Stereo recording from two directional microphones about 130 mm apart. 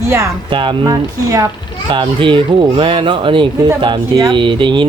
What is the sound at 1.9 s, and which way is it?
Speech, 40° right (ahead or behind).